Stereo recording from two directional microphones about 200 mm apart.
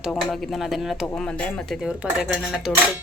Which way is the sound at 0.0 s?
Centre (ahead or behind).